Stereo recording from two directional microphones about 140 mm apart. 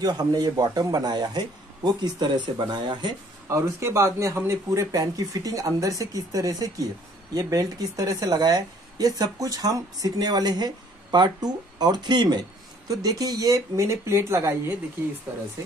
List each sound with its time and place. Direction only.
0.0 s speech: 30° right (ahead or behind)
3.4 s speech: 20° right (ahead or behind)